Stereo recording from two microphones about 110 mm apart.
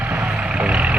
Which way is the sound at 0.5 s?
10° right (ahead or behind).